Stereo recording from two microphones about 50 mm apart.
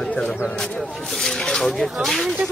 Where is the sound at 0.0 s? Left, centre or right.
Centre.